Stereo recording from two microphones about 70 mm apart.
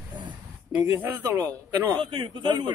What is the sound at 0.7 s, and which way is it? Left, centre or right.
Speech, right.